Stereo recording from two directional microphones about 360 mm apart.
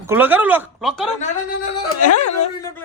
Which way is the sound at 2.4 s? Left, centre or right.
Centre.